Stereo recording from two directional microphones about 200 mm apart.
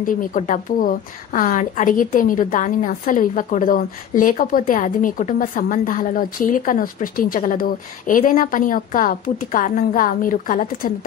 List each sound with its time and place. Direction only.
0.0 s a woman's voice: 40° left (ahead or behind)